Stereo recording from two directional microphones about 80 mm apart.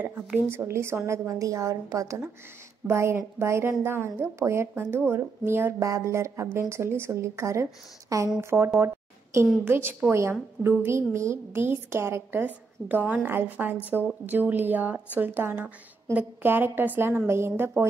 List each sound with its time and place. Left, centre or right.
0.0 s speech: right
5.8 s a woman's voice: right